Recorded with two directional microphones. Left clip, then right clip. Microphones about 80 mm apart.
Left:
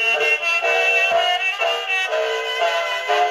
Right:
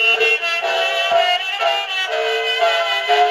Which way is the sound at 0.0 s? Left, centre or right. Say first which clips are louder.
Right 3 dB; right.